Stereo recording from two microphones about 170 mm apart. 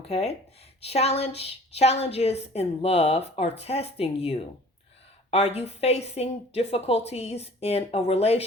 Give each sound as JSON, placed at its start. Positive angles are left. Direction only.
{"t": 0.1, "sound": "speech", "side_deg": 40}